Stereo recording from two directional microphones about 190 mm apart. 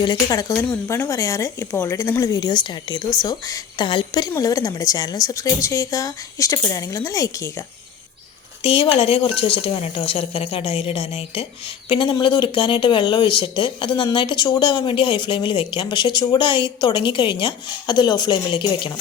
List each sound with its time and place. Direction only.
0.0 s a woman's voice: 20° left (ahead or behind)
8.6 s speech: 30° left (ahead or behind)